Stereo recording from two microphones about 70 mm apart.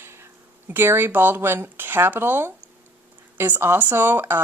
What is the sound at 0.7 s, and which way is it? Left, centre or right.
Speech, right.